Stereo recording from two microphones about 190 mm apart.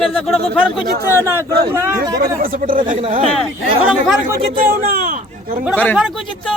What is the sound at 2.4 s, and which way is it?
Speech, 45° right (ahead or behind).